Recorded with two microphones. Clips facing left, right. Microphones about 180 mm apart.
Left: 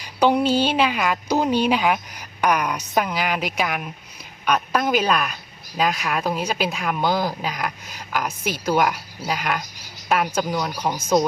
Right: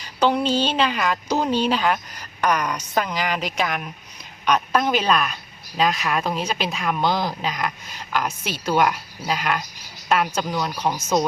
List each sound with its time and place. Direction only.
0.0 s speech: 10° left (ahead or behind)